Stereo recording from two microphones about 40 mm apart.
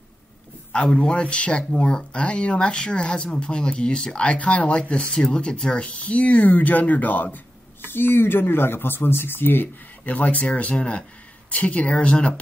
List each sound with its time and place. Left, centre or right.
0.9 s speech: left
7.3 s speech: left
10.0 s speech: left